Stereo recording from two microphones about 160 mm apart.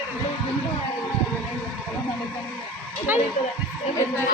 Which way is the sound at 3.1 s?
10° right (ahead or behind).